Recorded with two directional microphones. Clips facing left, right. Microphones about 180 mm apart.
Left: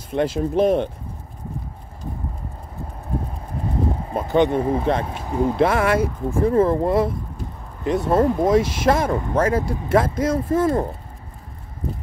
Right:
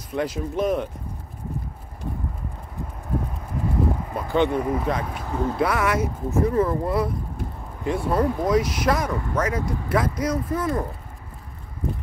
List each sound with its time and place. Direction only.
0.1 s speech: 25° left (ahead or behind)
4.1 s speech: 25° left (ahead or behind)